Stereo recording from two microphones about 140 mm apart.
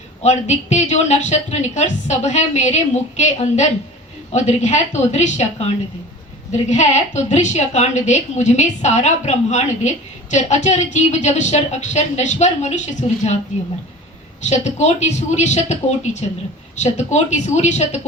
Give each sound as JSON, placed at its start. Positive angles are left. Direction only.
{"t": 0.2, "sound": "a woman's voice", "side_deg": 55}
{"t": 14.4, "sound": "a woman's voice", "side_deg": 55}